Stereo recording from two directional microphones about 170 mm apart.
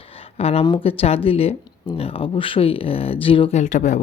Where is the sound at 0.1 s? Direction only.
35° left (ahead or behind).